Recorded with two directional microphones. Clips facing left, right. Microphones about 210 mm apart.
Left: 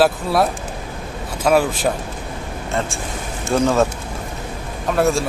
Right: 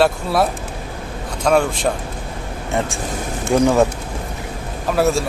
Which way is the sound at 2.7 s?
15° right (ahead or behind).